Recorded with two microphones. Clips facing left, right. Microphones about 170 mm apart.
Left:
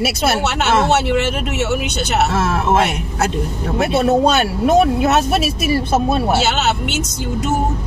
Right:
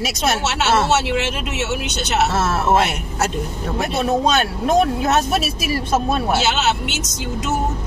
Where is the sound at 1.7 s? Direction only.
60° left (ahead or behind).